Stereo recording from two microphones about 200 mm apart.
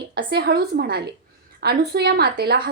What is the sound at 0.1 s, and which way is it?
A woman's voice, 50° right (ahead or behind).